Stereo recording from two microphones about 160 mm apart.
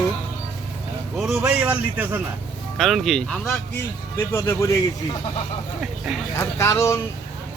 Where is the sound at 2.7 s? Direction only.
Centre (ahead or behind).